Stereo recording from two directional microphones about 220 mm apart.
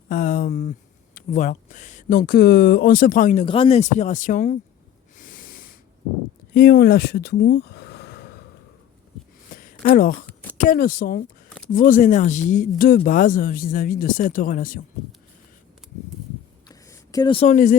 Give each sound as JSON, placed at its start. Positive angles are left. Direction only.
{"t": 0.1, "sound": "speech", "side_deg": 40}
{"t": 3.4, "sound": "speech", "side_deg": 25}
{"t": 5.1, "sound": "snort", "side_deg": 40}
{"t": 6.5, "sound": "speech", "side_deg": 45}
{"t": 9.6, "sound": "a sound", "side_deg": 40}
{"t": 10.6, "sound": "speech", "side_deg": 40}
{"t": 16.6, "sound": "a sound", "side_deg": 15}